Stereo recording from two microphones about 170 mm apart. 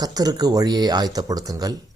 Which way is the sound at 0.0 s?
20° right (ahead or behind).